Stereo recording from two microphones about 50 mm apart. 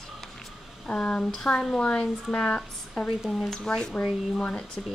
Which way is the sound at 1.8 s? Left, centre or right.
Centre.